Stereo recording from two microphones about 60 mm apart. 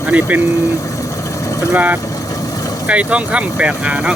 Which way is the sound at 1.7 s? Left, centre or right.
Right.